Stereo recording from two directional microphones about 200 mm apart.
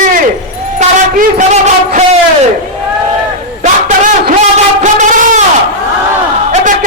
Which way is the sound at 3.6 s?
40° right (ahead or behind).